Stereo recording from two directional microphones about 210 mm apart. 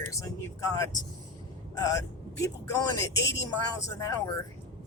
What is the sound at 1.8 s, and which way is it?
Speech, 15° left (ahead or behind).